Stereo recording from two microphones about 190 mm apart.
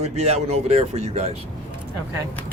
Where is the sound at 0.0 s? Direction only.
35° right (ahead or behind).